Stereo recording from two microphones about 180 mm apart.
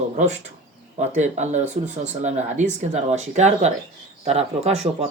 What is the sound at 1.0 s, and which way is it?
Speech, 40° right (ahead or behind).